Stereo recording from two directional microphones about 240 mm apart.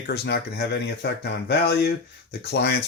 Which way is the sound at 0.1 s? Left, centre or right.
Left.